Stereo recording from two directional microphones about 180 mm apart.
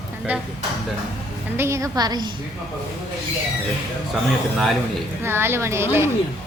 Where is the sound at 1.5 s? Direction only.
15° right (ahead or behind).